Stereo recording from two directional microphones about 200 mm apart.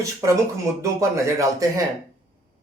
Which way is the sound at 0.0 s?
15° right (ahead or behind).